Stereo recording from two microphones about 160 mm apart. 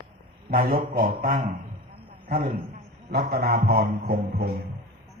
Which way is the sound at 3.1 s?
75° right (ahead or behind).